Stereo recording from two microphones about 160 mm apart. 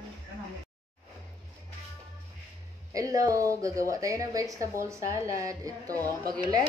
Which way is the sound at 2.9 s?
20° right (ahead or behind).